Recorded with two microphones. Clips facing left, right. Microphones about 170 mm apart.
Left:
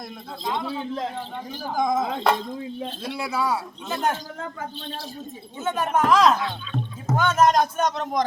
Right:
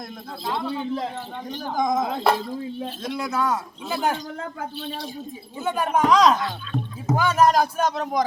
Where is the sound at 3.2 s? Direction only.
5° left (ahead or behind).